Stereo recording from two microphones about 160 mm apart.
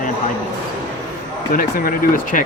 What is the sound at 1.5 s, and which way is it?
Speech, 60° left (ahead or behind).